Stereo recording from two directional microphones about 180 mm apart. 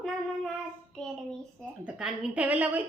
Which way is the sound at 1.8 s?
5° right (ahead or behind).